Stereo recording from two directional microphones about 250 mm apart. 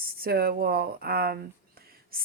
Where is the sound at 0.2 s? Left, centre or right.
Right.